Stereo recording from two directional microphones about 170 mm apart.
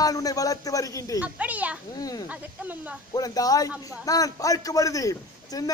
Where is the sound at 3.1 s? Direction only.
20° left (ahead or behind).